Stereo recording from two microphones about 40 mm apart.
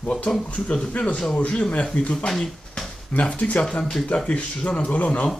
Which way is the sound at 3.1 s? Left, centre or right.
Left.